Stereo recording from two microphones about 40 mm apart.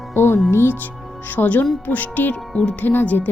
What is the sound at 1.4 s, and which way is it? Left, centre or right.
Speech, left.